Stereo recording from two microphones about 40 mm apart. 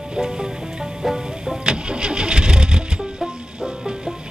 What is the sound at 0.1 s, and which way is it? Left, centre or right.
Music, centre.